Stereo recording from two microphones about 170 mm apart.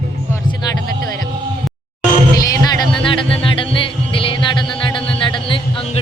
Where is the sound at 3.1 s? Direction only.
30° left (ahead or behind).